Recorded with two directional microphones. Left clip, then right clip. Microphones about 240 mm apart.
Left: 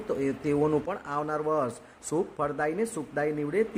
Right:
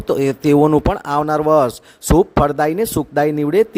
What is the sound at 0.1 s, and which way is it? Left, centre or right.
Speech, right.